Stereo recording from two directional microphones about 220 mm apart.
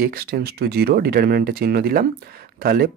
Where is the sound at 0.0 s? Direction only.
45° right (ahead or behind).